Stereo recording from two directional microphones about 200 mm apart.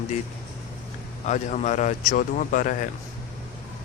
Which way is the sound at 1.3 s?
35° left (ahead or behind).